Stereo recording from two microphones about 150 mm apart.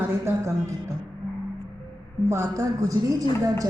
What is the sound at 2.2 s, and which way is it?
Speech, 20° right (ahead or behind).